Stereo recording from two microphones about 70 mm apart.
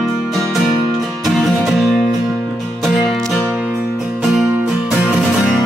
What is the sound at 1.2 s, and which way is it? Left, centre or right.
Music, centre.